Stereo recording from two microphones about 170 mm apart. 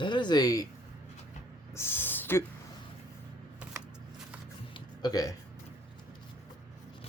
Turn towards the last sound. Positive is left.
turn(degrees=20)  # may be behind; listen again after turning